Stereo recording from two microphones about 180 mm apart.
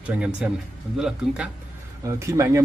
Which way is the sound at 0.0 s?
10° right (ahead or behind).